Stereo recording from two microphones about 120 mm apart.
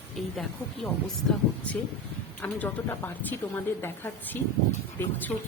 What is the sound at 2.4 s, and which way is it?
A woman's voice, 15° left (ahead or behind).